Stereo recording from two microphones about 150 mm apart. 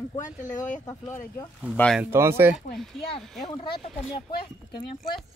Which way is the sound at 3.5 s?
35° left (ahead or behind).